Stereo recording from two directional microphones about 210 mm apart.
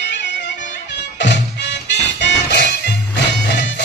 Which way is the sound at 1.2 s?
55° left (ahead or behind).